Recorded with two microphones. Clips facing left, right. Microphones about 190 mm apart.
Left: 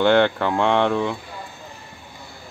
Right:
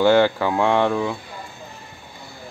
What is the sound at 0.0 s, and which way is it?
Speech, 5° right (ahead or behind).